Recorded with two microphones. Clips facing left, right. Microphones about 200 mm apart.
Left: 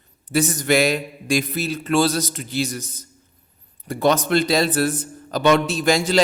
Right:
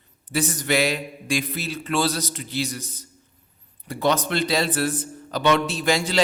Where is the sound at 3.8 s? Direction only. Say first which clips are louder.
Left 4 dB; 45° left (ahead or behind).